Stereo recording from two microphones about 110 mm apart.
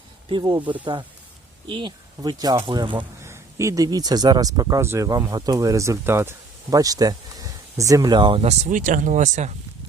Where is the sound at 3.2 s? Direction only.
25° right (ahead or behind).